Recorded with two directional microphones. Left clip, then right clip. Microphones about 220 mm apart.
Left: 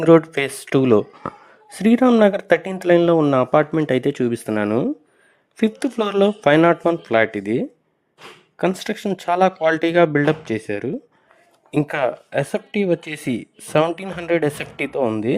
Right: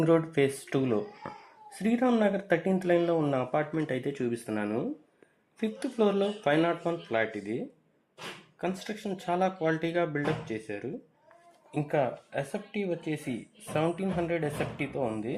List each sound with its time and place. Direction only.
0.0 s speech: 40° left (ahead or behind)